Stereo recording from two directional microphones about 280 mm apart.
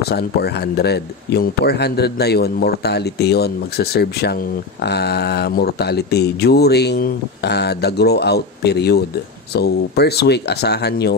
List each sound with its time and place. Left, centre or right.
0.0 s speech: left